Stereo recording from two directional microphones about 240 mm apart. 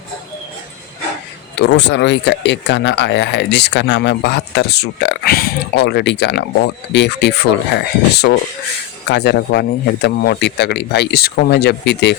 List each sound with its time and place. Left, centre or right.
1.5 s speech: left